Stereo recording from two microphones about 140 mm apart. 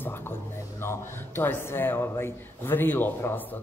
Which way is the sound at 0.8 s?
15° left (ahead or behind).